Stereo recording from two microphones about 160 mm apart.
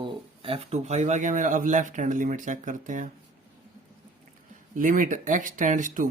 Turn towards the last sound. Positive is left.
turn(degrees=-55)  # may be behind; listen again after turning